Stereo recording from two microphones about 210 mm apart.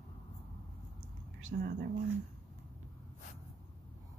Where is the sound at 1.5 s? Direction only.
45° right (ahead or behind).